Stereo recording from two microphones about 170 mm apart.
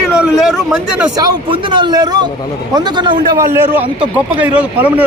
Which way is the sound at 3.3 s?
10° right (ahead or behind).